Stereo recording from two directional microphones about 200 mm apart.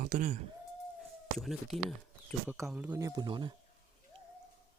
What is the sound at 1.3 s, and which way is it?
Cricket, centre (ahead or behind).